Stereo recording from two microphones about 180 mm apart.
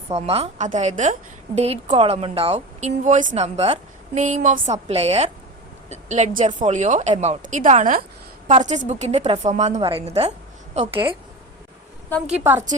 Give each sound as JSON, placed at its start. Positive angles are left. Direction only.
{"t": 0.1, "sound": "a woman's voice", "side_deg": -35}
{"t": 12.4, "sound": "a woman's voice", "side_deg": -10}